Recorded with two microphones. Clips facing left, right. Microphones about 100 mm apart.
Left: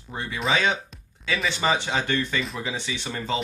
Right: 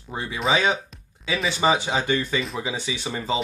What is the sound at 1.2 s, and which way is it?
Speech, 10° right (ahead or behind).